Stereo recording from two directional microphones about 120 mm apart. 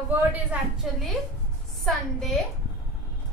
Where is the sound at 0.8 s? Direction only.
5° right (ahead or behind).